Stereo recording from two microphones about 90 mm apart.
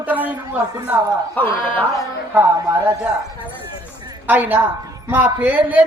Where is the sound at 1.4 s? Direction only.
20° left (ahead or behind).